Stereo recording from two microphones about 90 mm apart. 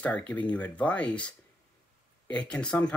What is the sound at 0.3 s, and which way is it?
Speech, 15° left (ahead or behind).